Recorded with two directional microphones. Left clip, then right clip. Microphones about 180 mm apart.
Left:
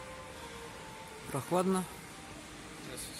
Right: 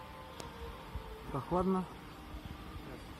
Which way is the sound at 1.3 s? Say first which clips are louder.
Left 2 dB; 25° left (ahead or behind).